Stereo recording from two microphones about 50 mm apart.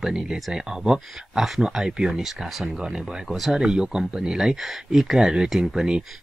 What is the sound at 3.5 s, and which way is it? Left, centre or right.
Speech, centre.